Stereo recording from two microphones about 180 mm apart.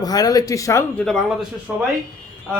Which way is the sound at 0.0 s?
20° left (ahead or behind).